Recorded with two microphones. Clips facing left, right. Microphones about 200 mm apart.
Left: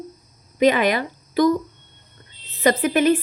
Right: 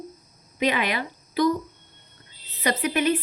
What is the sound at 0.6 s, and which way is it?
Speech, 45° left (ahead or behind).